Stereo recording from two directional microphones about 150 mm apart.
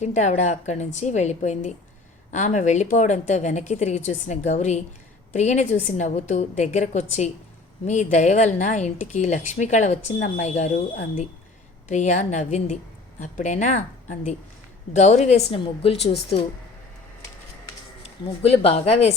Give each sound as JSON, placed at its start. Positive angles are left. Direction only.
{"t": 0.0, "sound": "speech", "side_deg": 50}
{"t": 18.0, "sound": "speech", "side_deg": 40}